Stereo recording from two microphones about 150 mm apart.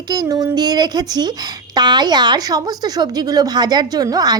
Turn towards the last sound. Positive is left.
turn(degrees=-25)  # may be behind; listen again after turning